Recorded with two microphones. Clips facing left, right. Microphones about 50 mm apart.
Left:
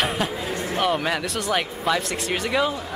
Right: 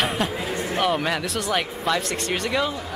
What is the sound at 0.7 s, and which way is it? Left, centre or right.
Speech, centre.